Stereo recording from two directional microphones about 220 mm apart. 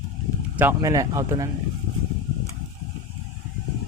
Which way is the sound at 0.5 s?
10° right (ahead or behind).